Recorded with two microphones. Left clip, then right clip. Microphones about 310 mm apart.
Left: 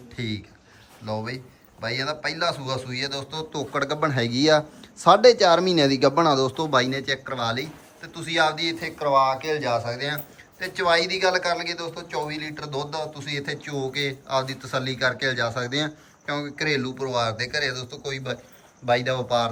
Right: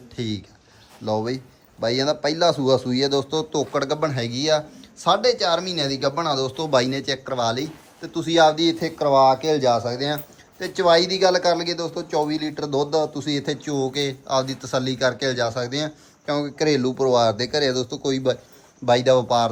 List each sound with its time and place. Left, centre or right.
0.2 s speech: centre
9.0 s speech: right
9.6 s speech: centre